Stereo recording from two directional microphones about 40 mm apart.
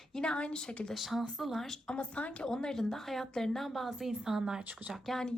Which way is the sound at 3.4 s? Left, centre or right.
Centre.